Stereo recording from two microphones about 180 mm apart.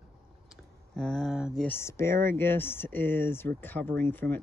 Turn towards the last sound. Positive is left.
turn(degrees=10)  # may be behind; listen again after turning